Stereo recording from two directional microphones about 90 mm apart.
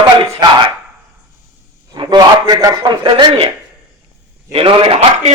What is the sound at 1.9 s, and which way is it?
A man's voice, 55° right (ahead or behind).